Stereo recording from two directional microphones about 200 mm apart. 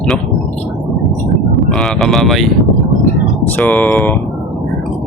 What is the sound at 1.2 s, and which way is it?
Speech, centre (ahead or behind).